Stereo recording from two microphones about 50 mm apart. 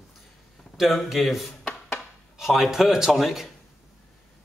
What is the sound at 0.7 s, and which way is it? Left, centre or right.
A man's voice, centre.